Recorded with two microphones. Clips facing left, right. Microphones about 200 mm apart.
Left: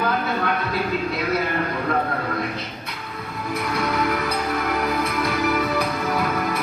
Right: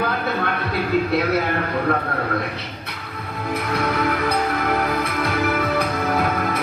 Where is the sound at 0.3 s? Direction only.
55° right (ahead or behind).